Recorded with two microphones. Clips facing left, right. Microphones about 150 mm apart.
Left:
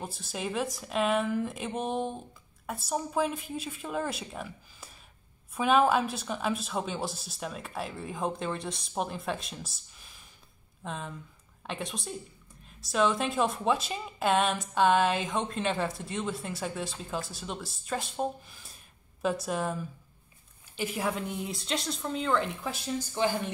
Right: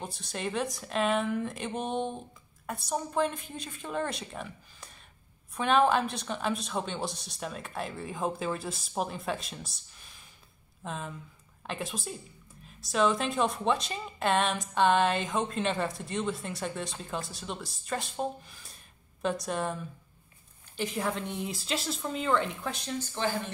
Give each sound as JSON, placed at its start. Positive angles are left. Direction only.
{"t": 0.0, "sound": "speech", "side_deg": 0}